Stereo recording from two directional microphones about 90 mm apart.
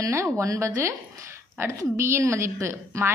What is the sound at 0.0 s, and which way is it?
A woman's voice, 35° right (ahead or behind).